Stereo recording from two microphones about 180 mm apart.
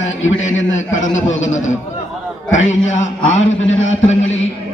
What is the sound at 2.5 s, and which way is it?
Speech, 40° left (ahead or behind).